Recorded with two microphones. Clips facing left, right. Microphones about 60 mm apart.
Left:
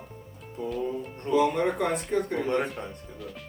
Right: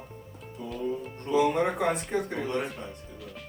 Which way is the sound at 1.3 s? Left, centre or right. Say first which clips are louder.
Left 1 dB; centre.